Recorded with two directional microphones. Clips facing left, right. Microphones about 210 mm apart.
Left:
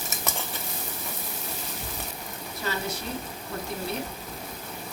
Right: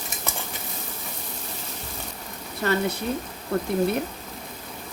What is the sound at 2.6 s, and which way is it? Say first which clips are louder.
Speech: right 8 dB; 60° right (ahead or behind).